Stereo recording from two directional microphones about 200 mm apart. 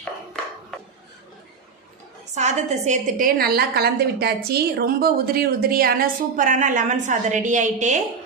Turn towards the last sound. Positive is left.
turn(degrees=-35)  # may be behind; listen again after turning